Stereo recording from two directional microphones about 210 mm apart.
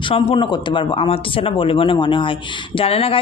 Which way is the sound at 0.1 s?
25° left (ahead or behind).